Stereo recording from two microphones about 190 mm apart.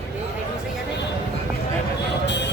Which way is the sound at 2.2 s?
65° left (ahead or behind).